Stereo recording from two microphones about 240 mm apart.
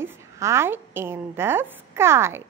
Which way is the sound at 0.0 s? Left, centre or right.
Centre.